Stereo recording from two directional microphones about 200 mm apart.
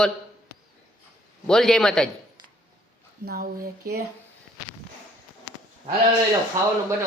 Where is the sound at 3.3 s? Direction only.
50° right (ahead or behind).